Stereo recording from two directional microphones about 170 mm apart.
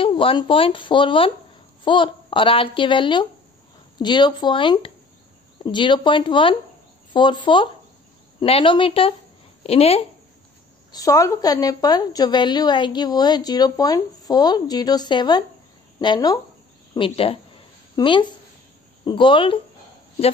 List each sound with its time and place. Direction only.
0.0 s a woman's voice: 30° left (ahead or behind)
10.9 s a woman's voice: 20° left (ahead or behind)